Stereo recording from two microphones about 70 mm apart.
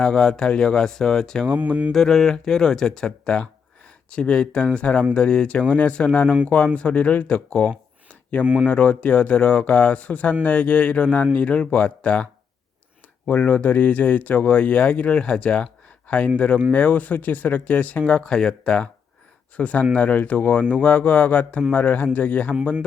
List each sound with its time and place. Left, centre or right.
0.0 s speech: centre
1.5 s mantra: right
1.9 s speech: centre; by 22.5 s left